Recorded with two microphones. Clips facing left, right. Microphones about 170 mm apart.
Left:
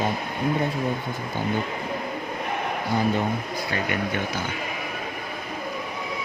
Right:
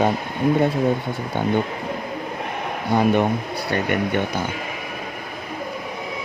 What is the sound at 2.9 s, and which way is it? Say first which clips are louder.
Speech: right 6 dB; 65° right (ahead or behind).